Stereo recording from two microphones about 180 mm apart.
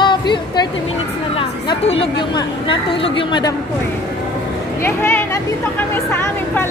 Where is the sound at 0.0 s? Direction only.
25° left (ahead or behind).